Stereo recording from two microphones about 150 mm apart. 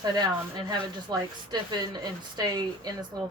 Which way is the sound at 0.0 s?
25° right (ahead or behind).